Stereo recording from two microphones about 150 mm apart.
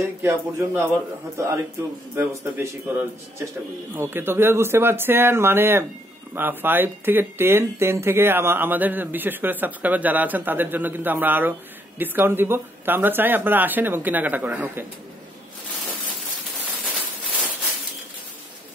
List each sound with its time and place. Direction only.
0.0 s speech: 15° right (ahead or behind)
2.1 s speech: 15° right (ahead or behind)